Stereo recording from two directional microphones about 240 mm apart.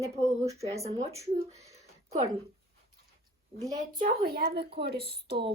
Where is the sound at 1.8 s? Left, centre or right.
Right.